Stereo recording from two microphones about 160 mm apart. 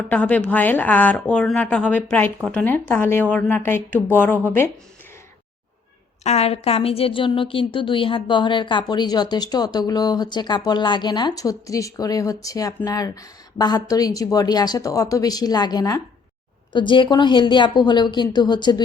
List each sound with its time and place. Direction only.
0.1 s speech: 10° left (ahead or behind)
6.2 s speech: 40° left (ahead or behind)